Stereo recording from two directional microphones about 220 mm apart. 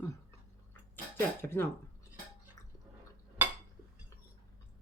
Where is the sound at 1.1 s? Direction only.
10° left (ahead or behind).